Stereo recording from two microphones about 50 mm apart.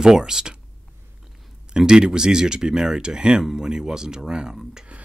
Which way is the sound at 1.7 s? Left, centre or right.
Centre.